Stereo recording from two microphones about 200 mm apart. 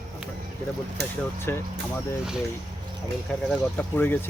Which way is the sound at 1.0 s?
55° right (ahead or behind).